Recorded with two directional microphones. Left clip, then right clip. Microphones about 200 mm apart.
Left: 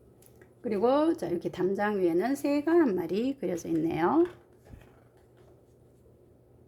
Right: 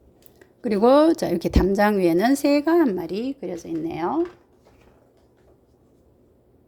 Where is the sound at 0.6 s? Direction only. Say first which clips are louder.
Right 9 dB; 30° right (ahead or behind); by 4.2 s 5° left (ahead or behind).